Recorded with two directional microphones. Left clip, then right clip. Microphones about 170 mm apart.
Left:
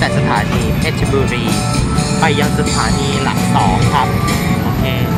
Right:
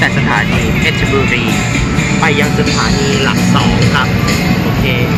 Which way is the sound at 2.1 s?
15° left (ahead or behind).